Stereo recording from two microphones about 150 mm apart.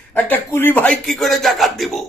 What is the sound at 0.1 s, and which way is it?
Speech, 10° left (ahead or behind).